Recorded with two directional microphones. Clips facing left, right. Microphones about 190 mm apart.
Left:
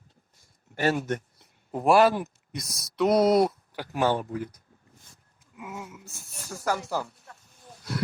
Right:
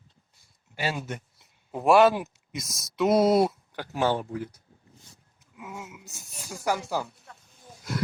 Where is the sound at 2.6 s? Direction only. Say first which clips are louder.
Even; 25° right (ahead or behind).